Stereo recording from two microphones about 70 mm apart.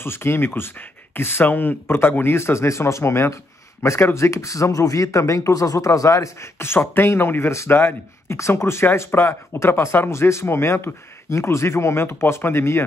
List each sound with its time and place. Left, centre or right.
0.0 s speech: left